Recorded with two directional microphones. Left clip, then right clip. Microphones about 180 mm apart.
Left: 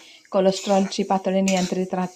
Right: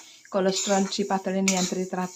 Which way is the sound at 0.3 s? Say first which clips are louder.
Left 5 dB; 10° left (ahead or behind).